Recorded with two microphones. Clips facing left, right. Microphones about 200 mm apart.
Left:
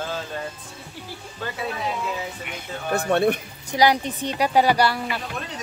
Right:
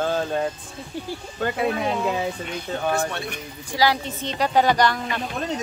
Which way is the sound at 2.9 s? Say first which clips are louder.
Left 8 dB; 60° left (ahead or behind).